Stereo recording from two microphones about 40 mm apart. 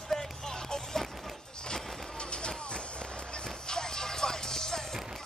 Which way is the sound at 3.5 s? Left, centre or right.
Centre.